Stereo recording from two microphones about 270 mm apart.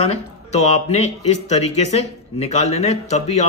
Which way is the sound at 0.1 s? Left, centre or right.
Left.